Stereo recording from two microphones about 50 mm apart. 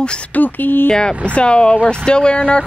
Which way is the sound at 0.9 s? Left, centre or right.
Centre.